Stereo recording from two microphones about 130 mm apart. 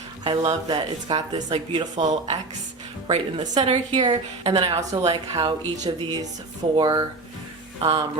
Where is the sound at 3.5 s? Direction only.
45° right (ahead or behind).